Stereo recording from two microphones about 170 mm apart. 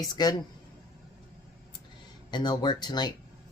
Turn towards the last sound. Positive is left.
turn(degrees=25)  # may be behind; listen again after turning